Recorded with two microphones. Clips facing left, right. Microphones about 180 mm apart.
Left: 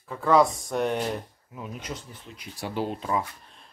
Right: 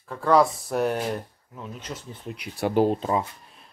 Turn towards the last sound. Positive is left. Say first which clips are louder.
# right 3 dB
turn(degrees=-25)  # may be behind; listen again after turning